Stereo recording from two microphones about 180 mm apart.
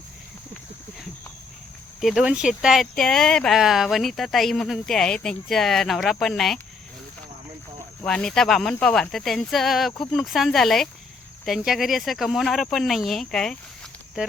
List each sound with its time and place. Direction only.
2.0 s speech: centre (ahead or behind)
8.0 s speech: 5° left (ahead or behind)